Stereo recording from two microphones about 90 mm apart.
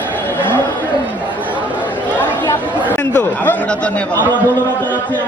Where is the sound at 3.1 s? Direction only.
20° left (ahead or behind).